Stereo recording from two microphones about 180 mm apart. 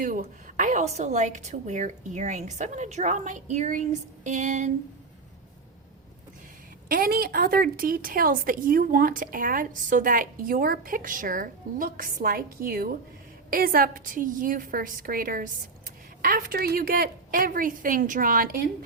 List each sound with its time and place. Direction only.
0.0 s speech: 50° right (ahead or behind)
6.8 s speech: 55° right (ahead or behind)